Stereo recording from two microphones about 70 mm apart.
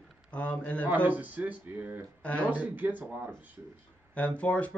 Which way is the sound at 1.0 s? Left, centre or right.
Right.